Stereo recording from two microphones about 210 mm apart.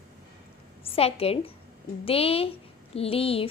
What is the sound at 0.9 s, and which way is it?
A woman's voice, 30° left (ahead or behind).